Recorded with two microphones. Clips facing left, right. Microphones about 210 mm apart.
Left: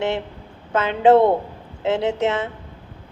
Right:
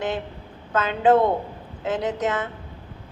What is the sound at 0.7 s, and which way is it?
A woman's voice, 25° left (ahead or behind).